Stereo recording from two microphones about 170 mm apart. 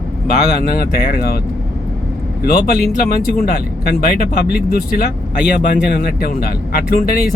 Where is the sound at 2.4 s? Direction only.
60° left (ahead or behind).